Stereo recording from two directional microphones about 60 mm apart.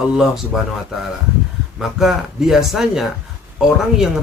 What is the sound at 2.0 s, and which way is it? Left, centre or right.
Speech, centre.